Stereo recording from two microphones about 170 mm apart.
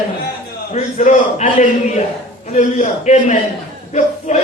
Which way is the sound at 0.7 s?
45° left (ahead or behind).